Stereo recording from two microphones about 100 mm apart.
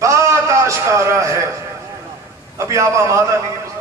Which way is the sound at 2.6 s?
30° right (ahead or behind).